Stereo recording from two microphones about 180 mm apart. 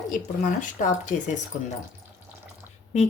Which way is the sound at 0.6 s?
45° left (ahead or behind).